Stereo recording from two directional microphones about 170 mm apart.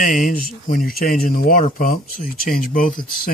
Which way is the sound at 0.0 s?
55° left (ahead or behind).